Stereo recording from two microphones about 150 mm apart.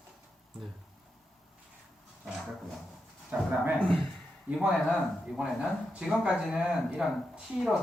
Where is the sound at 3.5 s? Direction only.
10° right (ahead or behind).